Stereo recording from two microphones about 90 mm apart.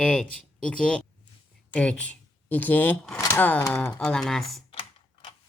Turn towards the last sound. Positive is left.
turn(degrees=90)